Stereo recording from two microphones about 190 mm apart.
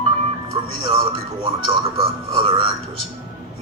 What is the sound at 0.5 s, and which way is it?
A man's voice, 30° right (ahead or behind).